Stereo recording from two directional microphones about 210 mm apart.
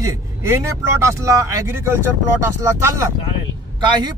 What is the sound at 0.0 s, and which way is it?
Speech, 15° right (ahead or behind).